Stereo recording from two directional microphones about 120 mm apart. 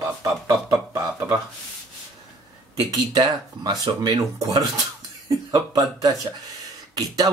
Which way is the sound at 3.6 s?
35° right (ahead or behind).